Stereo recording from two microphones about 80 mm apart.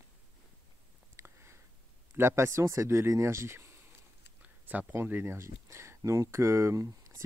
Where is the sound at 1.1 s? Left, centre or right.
Right.